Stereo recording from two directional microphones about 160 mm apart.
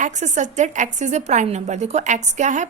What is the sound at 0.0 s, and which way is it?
A woman's voice, 50° right (ahead or behind).